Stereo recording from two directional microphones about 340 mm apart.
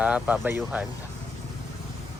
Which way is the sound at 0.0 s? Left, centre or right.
Centre.